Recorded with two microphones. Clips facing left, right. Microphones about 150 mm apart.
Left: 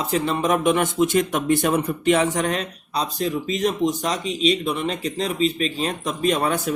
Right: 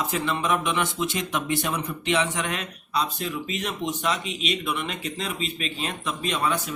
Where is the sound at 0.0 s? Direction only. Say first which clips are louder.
Left 5 dB; 35° left (ahead or behind).